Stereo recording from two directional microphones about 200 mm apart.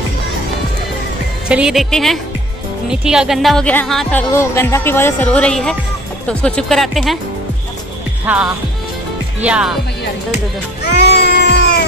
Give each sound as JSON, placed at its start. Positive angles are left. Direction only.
{"t": 1.5, "sound": "speech", "side_deg": -5}
{"t": 8.3, "sound": "music", "side_deg": -5}
{"t": 9.4, "sound": "speech", "side_deg": -5}
{"t": 10.8, "sound": "cat", "side_deg": 55}